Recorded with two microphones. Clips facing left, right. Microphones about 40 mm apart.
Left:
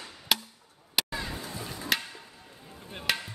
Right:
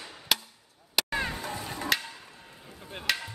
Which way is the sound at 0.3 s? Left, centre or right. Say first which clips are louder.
Even; centre.